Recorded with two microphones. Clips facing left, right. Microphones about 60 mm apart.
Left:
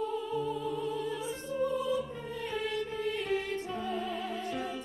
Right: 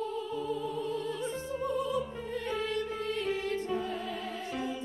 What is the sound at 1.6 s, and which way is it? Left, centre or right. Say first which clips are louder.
Opera: left 3 dB; right.